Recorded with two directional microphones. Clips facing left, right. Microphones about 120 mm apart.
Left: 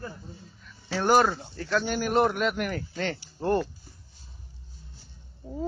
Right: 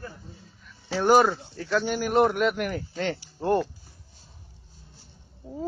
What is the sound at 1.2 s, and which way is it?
Speech, 5° right (ahead or behind).